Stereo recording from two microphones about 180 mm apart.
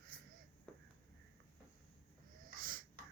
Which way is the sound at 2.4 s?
50° right (ahead or behind).